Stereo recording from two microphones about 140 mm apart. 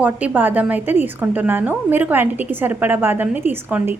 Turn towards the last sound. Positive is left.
turn(degrees=-15)  # may be behind; listen again after turning